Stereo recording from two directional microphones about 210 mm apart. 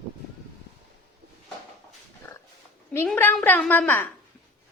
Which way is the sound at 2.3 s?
20° left (ahead or behind).